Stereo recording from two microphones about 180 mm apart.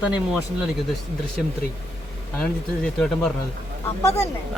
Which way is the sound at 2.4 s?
5° left (ahead or behind).